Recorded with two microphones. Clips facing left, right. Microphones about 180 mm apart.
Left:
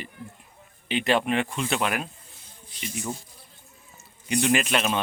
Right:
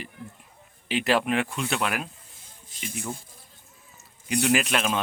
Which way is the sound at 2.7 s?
50° right (ahead or behind).